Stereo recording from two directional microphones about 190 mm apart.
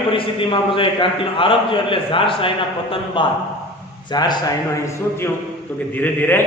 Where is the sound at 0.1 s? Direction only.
30° left (ahead or behind).